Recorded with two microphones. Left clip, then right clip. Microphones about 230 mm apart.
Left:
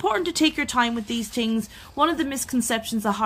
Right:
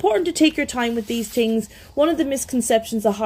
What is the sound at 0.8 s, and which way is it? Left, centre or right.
Speech, left.